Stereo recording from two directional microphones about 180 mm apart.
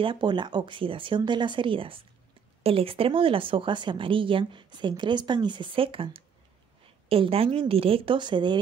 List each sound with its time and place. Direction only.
0.0 s a woman's voice: 25° right (ahead or behind)